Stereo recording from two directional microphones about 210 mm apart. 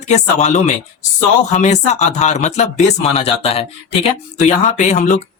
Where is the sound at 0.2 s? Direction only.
35° left (ahead or behind).